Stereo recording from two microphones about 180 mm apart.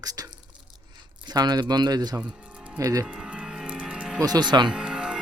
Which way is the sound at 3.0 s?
5° right (ahead or behind).